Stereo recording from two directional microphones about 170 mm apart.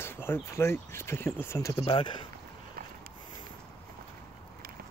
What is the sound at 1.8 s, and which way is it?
Speech, 30° left (ahead or behind).